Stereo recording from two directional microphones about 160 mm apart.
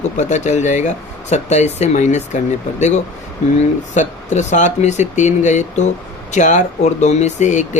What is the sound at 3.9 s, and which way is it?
Speech, 50° left (ahead or behind).